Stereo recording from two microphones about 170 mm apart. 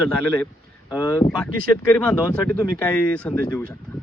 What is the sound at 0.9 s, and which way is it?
Speech, 20° left (ahead or behind).